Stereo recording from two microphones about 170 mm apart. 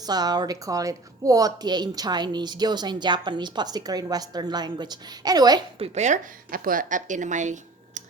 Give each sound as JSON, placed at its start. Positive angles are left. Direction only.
{"t": 0.0, "sound": "a woman's voice", "side_deg": -25}
{"t": 5.8, "sound": "a woman's voice", "side_deg": -40}